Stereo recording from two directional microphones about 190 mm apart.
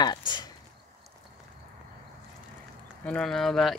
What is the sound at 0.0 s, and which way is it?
Speech, 20° left (ahead or behind).